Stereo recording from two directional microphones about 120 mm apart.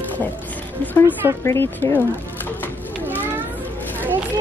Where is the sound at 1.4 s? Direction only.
20° left (ahead or behind).